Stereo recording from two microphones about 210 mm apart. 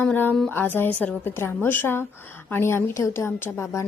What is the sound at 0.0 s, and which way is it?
A woman's voice, 10° left (ahead or behind).